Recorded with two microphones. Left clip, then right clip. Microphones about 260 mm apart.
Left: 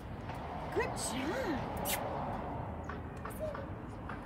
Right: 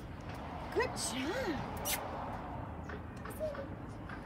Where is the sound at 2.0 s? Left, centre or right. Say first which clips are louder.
Left 3 dB; left.